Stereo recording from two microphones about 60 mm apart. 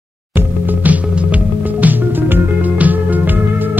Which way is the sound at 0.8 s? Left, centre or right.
Right.